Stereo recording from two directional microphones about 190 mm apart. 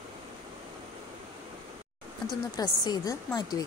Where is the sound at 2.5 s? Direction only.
20° left (ahead or behind).